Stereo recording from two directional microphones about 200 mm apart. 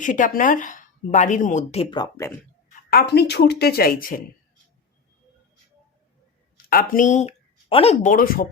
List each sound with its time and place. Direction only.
0.0 s a woman's voice: 40° left (ahead or behind); by 2.4 s 15° left (ahead or behind)
2.6 s speech: 45° left (ahead or behind)
6.7 s speech: 45° left (ahead or behind)
8.1 s speech: 45° left (ahead or behind)